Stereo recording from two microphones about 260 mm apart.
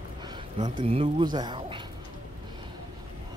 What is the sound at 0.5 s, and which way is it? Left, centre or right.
Speech, centre.